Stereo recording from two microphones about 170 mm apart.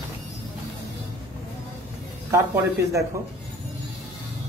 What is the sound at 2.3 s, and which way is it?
Speech, 20° right (ahead or behind).